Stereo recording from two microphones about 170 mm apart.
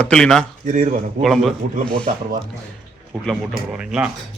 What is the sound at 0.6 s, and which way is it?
Speech, 50° right (ahead or behind).